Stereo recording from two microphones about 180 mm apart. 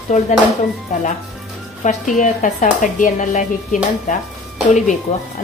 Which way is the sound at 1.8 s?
45° left (ahead or behind).